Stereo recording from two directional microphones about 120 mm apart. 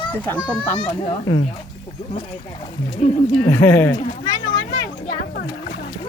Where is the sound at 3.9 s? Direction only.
35° left (ahead or behind).